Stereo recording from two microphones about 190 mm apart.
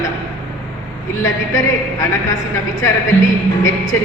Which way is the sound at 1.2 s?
15° left (ahead or behind).